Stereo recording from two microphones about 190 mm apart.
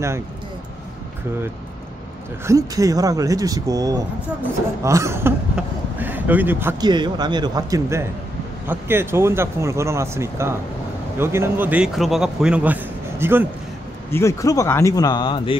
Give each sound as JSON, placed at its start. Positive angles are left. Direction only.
{"t": 2.4, "sound": "speech", "side_deg": -15}
{"t": 6.8, "sound": "speech", "side_deg": -20}
{"t": 14.1, "sound": "speech", "side_deg": 15}